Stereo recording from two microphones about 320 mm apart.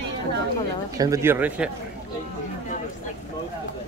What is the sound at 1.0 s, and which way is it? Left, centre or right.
Speech, centre.